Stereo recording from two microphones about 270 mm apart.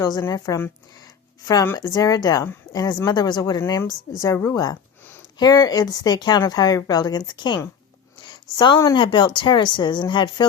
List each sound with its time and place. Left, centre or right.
0.0 s speech: centre